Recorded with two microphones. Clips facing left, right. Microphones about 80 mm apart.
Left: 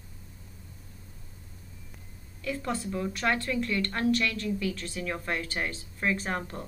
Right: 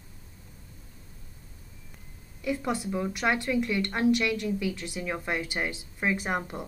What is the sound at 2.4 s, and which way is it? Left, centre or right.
A woman's voice, centre.